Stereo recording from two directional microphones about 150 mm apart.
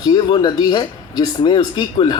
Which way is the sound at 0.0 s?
30° left (ahead or behind).